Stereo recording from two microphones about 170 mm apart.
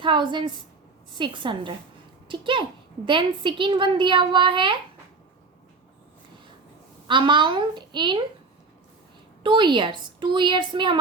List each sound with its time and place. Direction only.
0.0 s a woman's voice: 30° right (ahead or behind)
7.1 s a woman's voice: 30° right (ahead or behind)
9.4 s a woman's voice: 30° right (ahead or behind)